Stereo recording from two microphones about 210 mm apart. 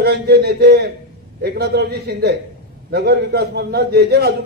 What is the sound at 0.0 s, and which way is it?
A man's voice, 50° right (ahead or behind).